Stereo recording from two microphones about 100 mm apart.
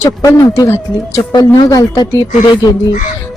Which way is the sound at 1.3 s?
40° left (ahead or behind).